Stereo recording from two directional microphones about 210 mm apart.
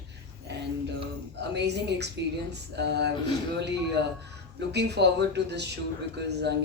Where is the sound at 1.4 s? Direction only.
55° right (ahead or behind).